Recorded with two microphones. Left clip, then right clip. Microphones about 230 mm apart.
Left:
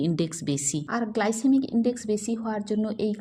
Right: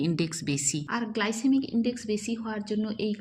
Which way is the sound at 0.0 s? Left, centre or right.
Centre.